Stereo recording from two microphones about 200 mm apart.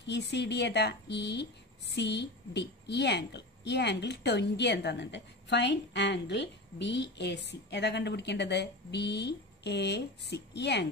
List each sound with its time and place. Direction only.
0.0 s speech: 60° left (ahead or behind)